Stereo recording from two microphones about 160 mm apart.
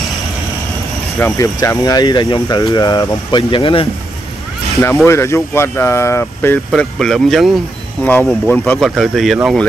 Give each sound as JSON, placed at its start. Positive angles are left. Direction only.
{"t": 1.2, "sound": "speech", "side_deg": 20}
{"t": 5.0, "sound": "speech", "side_deg": 15}
{"t": 6.7, "sound": "speech", "side_deg": 0}
{"t": 8.0, "sound": "speech", "side_deg": 10}
{"t": 8.7, "sound": "speech", "side_deg": 0}